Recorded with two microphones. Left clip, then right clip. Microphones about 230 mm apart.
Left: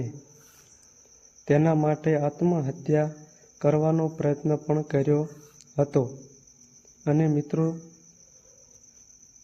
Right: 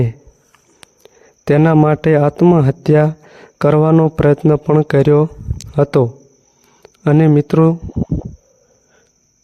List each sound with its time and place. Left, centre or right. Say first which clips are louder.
1.5 s speech: right 11 dB; right